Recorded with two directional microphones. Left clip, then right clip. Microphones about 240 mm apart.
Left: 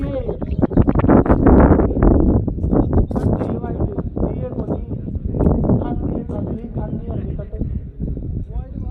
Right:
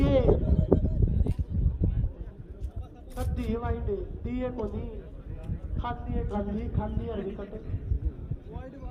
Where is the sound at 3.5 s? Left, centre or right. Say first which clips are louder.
Left 7 dB; right.